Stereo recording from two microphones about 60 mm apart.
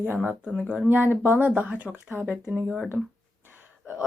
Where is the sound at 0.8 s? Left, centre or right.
Right.